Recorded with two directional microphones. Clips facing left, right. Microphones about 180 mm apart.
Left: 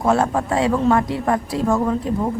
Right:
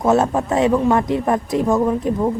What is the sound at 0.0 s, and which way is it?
A woman's voice, 20° right (ahead or behind).